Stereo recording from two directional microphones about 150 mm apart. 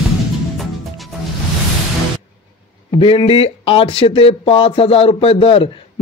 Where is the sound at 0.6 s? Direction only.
Centre (ahead or behind).